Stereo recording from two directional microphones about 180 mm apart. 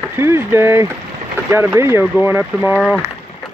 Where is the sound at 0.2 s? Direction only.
15° right (ahead or behind).